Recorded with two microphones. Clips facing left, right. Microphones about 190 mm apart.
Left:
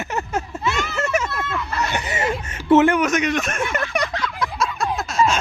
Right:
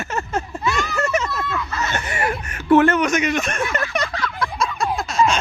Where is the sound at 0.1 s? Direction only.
15° left (ahead or behind).